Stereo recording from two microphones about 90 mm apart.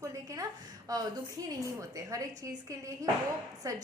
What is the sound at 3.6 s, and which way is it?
Speech, 35° right (ahead or behind).